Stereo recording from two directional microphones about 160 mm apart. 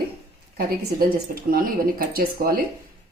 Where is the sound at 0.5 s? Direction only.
70° right (ahead or behind).